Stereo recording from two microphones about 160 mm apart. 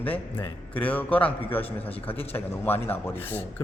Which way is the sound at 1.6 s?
40° left (ahead or behind).